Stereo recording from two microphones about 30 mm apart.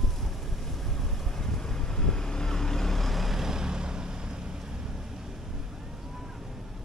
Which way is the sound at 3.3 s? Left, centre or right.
Centre.